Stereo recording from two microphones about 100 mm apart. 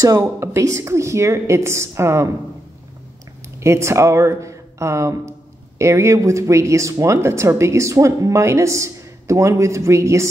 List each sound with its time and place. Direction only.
0.2 s speech: 25° right (ahead or behind)
3.5 s speech: 25° right (ahead or behind)